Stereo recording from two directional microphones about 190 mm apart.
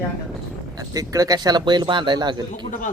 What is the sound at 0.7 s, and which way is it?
A man's voice, 20° right (ahead or behind).